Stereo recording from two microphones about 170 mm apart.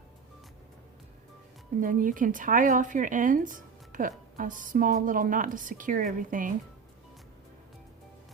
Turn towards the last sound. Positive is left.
turn(degrees=-50)  # may be behind; listen again after turning